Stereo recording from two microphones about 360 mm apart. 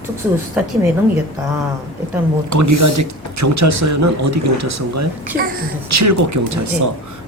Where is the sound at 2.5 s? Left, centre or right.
Right.